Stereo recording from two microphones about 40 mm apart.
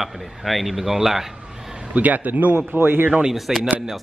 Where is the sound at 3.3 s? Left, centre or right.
Centre.